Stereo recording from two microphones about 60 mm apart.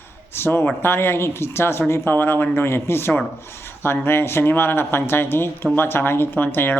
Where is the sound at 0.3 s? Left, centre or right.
Left.